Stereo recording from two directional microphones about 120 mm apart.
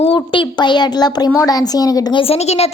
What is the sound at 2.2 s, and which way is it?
Speech, 60° left (ahead or behind).